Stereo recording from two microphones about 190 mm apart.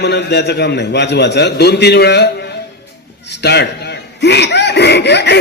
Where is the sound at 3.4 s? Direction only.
60° left (ahead or behind).